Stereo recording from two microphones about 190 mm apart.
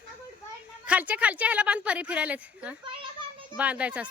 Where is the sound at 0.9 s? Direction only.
5° right (ahead or behind).